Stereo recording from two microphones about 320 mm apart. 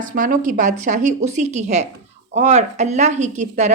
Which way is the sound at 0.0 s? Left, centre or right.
Right.